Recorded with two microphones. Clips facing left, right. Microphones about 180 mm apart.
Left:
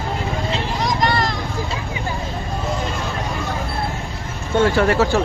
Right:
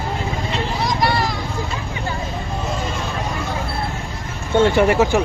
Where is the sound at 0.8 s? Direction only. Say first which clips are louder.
Even; 10° right (ahead or behind).